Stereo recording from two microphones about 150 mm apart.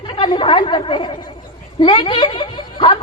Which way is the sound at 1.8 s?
30° left (ahead or behind).